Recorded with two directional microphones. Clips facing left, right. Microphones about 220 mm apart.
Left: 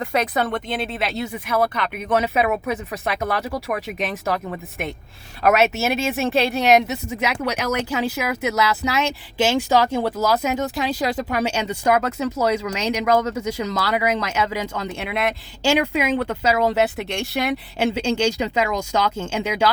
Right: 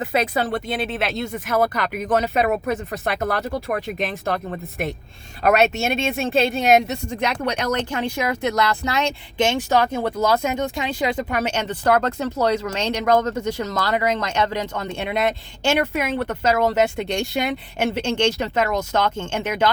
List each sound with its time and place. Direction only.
0.0 s speech: 25° right (ahead or behind)
0.8 s speech: centre (ahead or behind)
5.4 s speech: centre (ahead or behind)